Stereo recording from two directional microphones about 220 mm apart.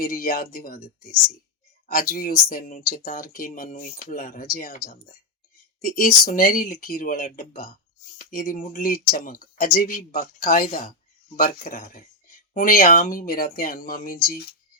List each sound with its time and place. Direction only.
0.0 s speech: 40° left (ahead or behind)
1.9 s speech: 40° left (ahead or behind)